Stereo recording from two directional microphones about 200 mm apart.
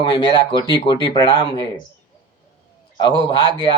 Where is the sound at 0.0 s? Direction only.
25° left (ahead or behind).